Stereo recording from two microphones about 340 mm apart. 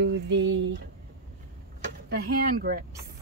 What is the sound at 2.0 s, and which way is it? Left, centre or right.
Speech, right.